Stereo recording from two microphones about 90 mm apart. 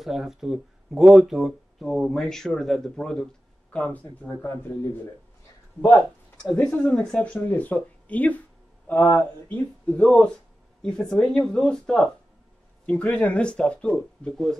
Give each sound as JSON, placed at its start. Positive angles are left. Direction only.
{"t": 0.0, "sound": "speech", "side_deg": -5}
{"t": 6.5, "sound": "speech", "side_deg": 15}
{"t": 12.8, "sound": "speech", "side_deg": 15}